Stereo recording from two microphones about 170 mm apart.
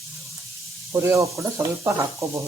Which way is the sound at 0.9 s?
15° right (ahead or behind).